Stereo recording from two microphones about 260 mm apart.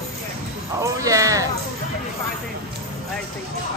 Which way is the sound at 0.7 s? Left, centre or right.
Centre.